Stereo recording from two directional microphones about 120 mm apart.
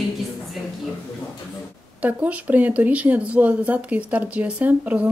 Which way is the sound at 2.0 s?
10° right (ahead or behind).